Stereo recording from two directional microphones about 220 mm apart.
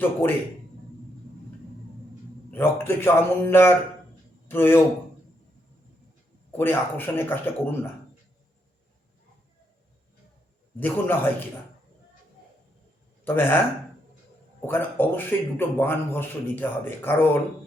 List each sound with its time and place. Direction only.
0.0 s a man's voice: 10° left (ahead or behind)
2.5 s a man's voice: 10° left (ahead or behind)
6.6 s a man's voice: 10° left (ahead or behind)
10.8 s a man's voice: 10° left (ahead or behind)
13.2 s a man's voice: 10° left (ahead or behind)
14.7 s a man's voice: 10° left (ahead or behind)